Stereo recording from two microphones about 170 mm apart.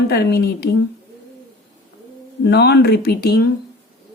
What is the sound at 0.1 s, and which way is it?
Speech, 75° left (ahead or behind).